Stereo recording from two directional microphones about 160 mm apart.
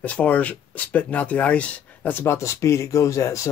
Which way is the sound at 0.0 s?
10° left (ahead or behind).